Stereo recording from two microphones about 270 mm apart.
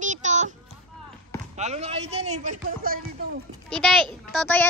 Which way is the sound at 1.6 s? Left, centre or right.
Right.